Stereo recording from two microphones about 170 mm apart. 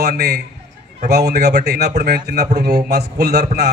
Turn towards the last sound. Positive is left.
turn(degrees=-75)  # may be behind; listen again after turning